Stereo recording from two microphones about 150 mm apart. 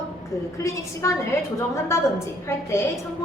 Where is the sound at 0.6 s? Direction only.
20° left (ahead or behind).